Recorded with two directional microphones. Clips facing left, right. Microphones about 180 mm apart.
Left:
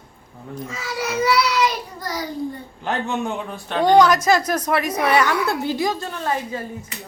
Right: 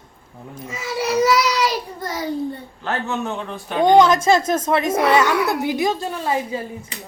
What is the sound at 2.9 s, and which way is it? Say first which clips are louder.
Speech: even; 15° left (ahead or behind).